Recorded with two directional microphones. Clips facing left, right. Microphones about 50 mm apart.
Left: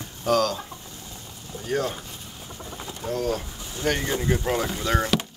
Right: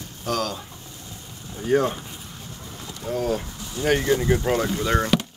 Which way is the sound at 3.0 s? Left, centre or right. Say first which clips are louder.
Right 2 dB; centre.